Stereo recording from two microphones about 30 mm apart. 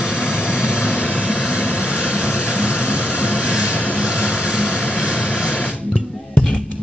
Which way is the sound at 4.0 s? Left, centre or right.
Right.